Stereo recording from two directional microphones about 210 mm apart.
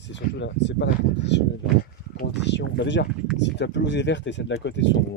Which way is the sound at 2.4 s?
55° left (ahead or behind).